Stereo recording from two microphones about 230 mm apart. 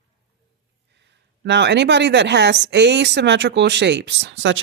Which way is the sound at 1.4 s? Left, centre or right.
Right.